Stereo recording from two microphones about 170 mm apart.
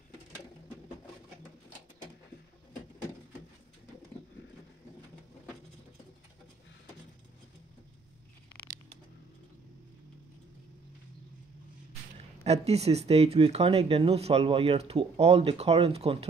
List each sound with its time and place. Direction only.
12.4 s speech: 40° right (ahead or behind)